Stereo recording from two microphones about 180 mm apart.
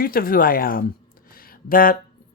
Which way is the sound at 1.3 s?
55° left (ahead or behind).